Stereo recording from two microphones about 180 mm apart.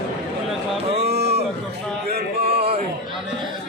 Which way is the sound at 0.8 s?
35° right (ahead or behind).